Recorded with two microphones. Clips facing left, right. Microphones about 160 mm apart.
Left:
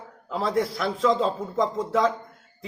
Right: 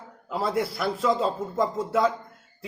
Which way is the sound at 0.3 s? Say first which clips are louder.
Left 1 dB; 5° right (ahead or behind).